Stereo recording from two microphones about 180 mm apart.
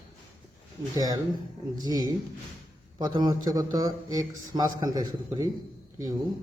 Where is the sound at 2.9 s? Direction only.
25° right (ahead or behind).